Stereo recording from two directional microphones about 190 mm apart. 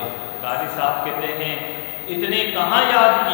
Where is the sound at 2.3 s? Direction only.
15° left (ahead or behind).